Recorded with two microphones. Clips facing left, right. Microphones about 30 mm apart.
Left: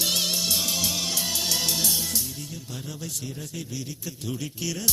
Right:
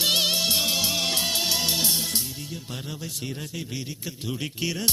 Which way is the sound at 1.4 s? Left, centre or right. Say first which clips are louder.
Right 1 dB; right.